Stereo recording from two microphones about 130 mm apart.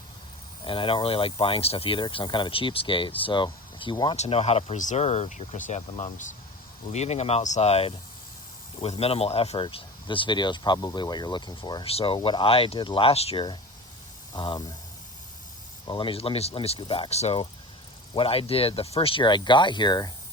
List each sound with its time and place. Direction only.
0.6 s speech: 40° left (ahead or behind)
4.2 s speech: 50° left (ahead or behind); by 6.1 s 70° left (ahead or behind)
6.9 s speech: 60° left (ahead or behind); by 11.9 s 35° left (ahead or behind)
11.9 s speech: 45° left (ahead or behind)
14.3 s speech: 35° left (ahead or behind)
15.9 s speech: 40° left (ahead or behind)